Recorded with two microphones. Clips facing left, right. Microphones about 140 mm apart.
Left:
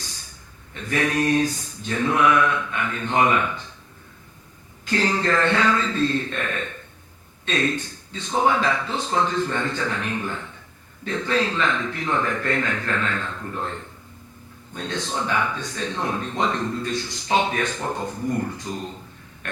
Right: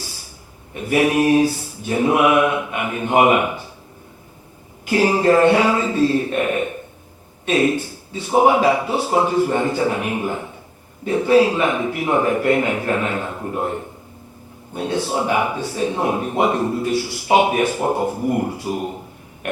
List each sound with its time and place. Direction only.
0.7 s speech: 15° right (ahead or behind)
4.9 s speech: 10° right (ahead or behind)